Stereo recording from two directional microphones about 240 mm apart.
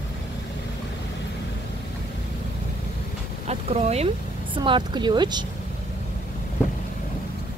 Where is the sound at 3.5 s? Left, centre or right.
Right.